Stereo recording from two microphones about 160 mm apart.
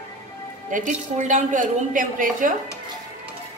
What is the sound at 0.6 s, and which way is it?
A woman's voice, 55° right (ahead or behind).